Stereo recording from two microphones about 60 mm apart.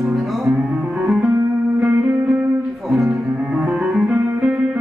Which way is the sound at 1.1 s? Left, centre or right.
Centre.